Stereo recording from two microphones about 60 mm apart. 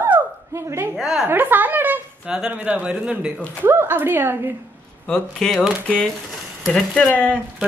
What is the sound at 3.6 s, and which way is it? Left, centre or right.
Speech, right.